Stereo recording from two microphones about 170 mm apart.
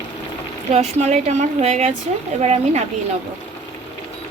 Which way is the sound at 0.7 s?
40° right (ahead or behind).